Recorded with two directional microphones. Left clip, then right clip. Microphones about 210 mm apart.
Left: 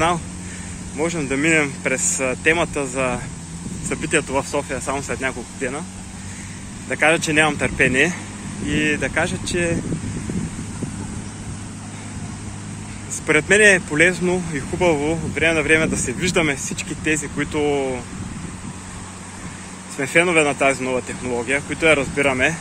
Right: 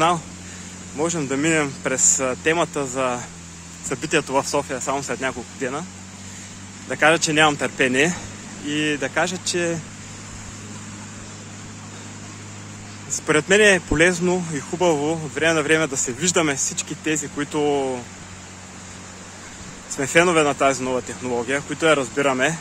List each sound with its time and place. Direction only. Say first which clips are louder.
0.9 s speech: left 1 dB; 30° right (ahead or behind)
6.9 s speech: even; 25° right (ahead or behind)
13.3 s speech: left 2 dB; 25° right (ahead or behind)
20.0 s speech: even; 30° right (ahead or behind)